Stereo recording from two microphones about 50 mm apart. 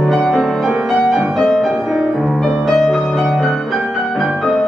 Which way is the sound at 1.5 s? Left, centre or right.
Centre.